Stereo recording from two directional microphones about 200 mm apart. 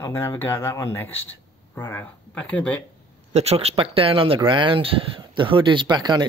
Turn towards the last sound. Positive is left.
turn(degrees=-20)  # may be behind; listen again after turning